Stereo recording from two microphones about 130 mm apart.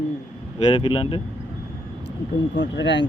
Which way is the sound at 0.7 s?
40° left (ahead or behind).